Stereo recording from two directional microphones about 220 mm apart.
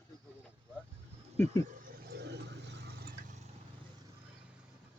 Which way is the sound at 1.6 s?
40° right (ahead or behind).